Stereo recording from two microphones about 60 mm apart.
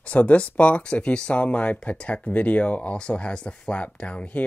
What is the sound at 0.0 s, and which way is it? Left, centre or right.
Speech, left.